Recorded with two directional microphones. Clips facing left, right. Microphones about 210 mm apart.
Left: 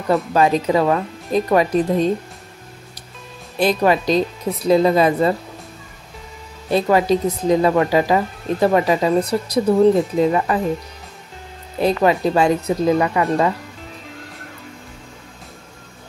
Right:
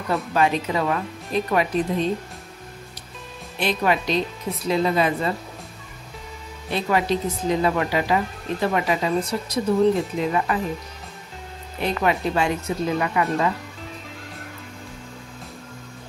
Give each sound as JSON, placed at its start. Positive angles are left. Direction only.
{"t": 0.1, "sound": "speech", "side_deg": 40}
{"t": 3.5, "sound": "speech", "side_deg": 40}
{"t": 6.7, "sound": "speech", "side_deg": 40}
{"t": 11.8, "sound": "speech", "side_deg": 35}